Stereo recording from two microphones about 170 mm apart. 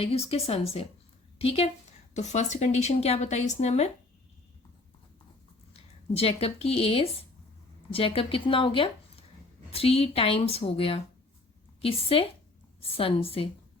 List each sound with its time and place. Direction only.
0.0 s a woman's voice: 35° left (ahead or behind)
5.7 s a woman's voice: 35° left (ahead or behind)